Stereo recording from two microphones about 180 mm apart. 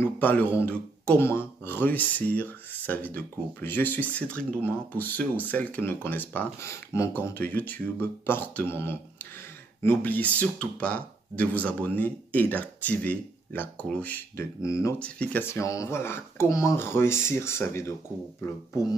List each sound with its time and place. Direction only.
0.0 s speech: 10° left (ahead or behind)
15.0 s speech: 5° left (ahead or behind)